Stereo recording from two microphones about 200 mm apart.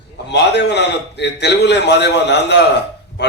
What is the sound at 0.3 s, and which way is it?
A man's voice, 60° left (ahead or behind).